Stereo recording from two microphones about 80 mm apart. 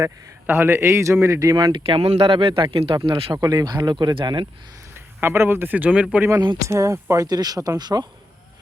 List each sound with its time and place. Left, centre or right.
0.4 s a man's voice: right
1.5 s speech: right
3.3 s speech: right
4.9 s speech: right; by 6.2 s centre
6.7 s a man's voice: right
7.3 s speech: right